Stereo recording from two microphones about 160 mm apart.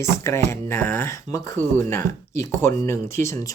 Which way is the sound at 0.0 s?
15° left (ahead or behind).